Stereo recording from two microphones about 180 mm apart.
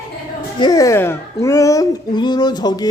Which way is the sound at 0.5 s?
20° left (ahead or behind).